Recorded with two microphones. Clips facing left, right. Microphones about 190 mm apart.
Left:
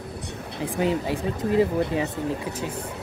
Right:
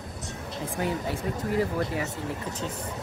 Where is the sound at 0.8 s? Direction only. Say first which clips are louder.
Left 6 dB; 15° left (ahead or behind).